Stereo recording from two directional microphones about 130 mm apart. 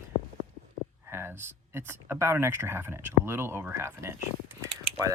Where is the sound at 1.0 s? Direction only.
20° right (ahead or behind).